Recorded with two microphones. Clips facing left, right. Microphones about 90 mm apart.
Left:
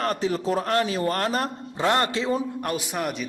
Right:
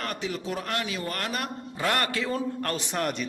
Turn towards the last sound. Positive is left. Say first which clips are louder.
# left 1 dB
turn(degrees=5)  # may be behind; listen again after turning